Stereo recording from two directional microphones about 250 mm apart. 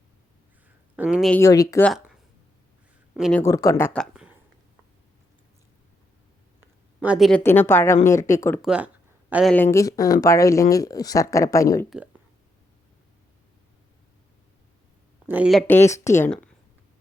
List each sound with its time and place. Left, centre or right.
0.9 s speech: centre
1.4 s speech: centre
3.2 s speech: centre
3.4 s speech: centre
7.0 s speech: centre
8.6 s speech: centre
9.7 s speech: centre
15.3 s speech: centre